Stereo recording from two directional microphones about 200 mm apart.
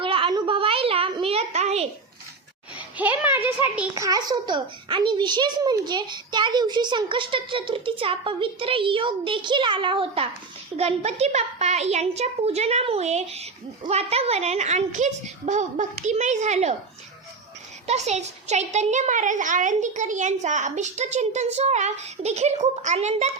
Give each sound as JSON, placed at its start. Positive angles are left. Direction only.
{"t": 0.0, "sound": "a sound", "side_deg": -25}
{"t": 2.7, "sound": "a child's voice", "side_deg": -10}
{"t": 17.8, "sound": "speech", "side_deg": -35}